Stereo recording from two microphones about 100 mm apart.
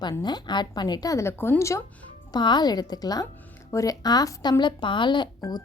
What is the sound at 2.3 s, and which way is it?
A woman's voice, 45° left (ahead or behind).